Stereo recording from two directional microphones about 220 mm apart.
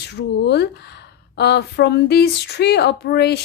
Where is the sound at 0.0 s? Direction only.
50° left (ahead or behind).